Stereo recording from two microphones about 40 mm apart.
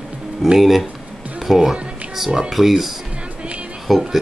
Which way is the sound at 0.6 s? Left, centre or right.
Centre.